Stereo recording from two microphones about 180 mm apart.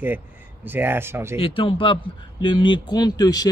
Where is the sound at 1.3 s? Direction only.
30° left (ahead or behind).